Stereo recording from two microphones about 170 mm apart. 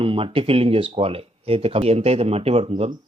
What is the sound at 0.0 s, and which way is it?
Speech, 35° right (ahead or behind).